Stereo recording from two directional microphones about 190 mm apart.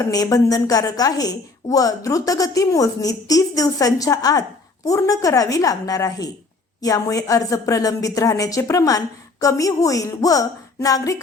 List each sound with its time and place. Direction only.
0.0 s a woman's voice: 20° left (ahead or behind)